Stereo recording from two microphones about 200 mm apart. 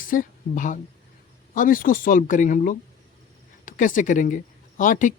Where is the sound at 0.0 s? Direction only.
45° left (ahead or behind).